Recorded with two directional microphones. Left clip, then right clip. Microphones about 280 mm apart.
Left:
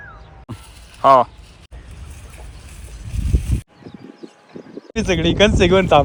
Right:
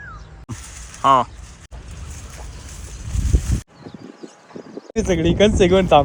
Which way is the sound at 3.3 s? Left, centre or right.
Centre.